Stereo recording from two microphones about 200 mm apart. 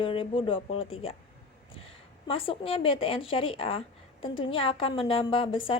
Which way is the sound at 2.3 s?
25° left (ahead or behind).